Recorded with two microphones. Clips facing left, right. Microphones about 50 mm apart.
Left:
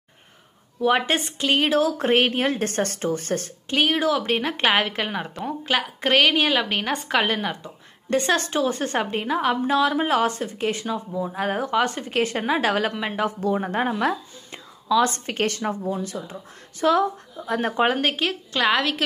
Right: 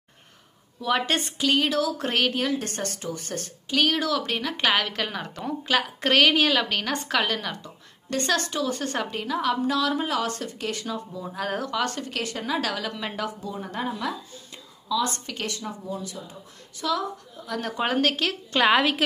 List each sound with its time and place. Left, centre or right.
0.7 s a woman's voice: left
2.6 s a woman's voice: left
3.8 s a woman's voice: left
5.8 s a woman's voice: centre; by 13.0 s left
13.0 s a woman's voice: left
13.4 s a woman's voice: left
17.8 s a woman's voice: centre
18.5 s a woman's voice: centre